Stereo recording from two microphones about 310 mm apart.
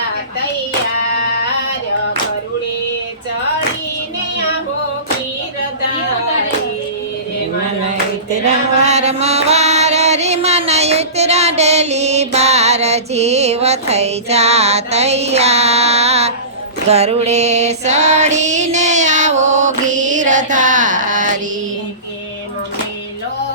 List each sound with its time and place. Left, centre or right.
8.4 s chant: right
10.7 s music: right
16.9 s female singing: centre